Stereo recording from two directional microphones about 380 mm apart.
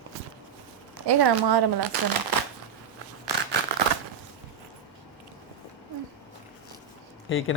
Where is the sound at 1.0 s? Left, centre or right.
Right.